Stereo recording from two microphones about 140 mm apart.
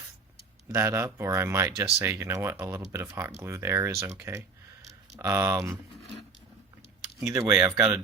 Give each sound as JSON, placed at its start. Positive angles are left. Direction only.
{"t": 0.7, "sound": "speech", "side_deg": -20}
{"t": 7.3, "sound": "speech", "side_deg": -20}